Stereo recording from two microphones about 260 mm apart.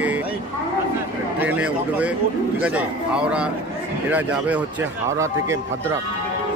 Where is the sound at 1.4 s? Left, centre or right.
Centre.